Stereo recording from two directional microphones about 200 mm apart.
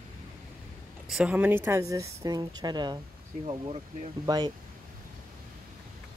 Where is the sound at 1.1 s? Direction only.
5° right (ahead or behind).